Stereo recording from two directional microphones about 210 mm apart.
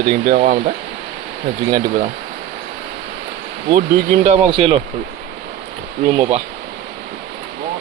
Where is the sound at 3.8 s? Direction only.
40° right (ahead or behind).